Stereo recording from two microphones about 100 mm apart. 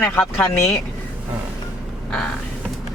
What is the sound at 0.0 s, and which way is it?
Speech, 20° left (ahead or behind).